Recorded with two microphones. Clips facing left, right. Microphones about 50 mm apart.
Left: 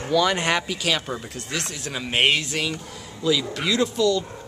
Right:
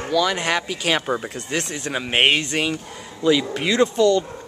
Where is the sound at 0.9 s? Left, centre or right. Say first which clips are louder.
Right 6 dB; right.